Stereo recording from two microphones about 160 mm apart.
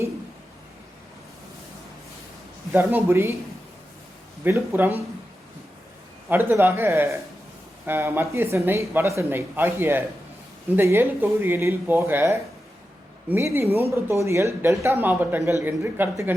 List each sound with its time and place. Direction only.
2.7 s speech: 15° right (ahead or behind)
4.4 s speech: 15° right (ahead or behind)
6.2 s speech: 10° right (ahead or behind)